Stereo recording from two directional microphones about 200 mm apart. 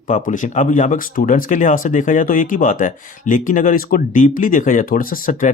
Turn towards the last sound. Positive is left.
turn(degrees=45)  # may be behind; listen again after turning